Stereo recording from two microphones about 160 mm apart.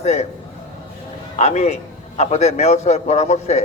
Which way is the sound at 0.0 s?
45° left (ahead or behind).